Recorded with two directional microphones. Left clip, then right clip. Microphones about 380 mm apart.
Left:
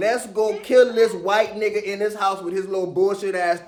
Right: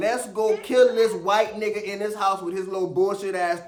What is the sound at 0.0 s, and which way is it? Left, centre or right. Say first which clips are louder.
A man's voice: left 3 dB; centre.